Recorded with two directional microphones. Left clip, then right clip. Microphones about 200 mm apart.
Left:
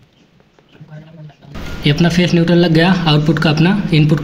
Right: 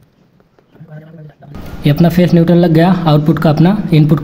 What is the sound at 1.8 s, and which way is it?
Speech, 55° right (ahead or behind).